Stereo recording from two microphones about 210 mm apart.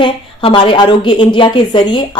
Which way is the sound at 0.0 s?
25° left (ahead or behind).